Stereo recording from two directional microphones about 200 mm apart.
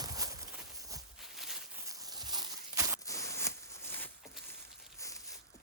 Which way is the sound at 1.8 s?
15° right (ahead or behind).